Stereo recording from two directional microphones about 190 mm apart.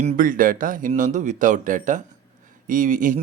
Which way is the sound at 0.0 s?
40° right (ahead or behind).